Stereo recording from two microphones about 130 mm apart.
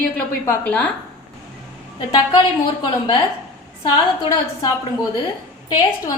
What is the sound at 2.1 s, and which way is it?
Speech, 35° left (ahead or behind).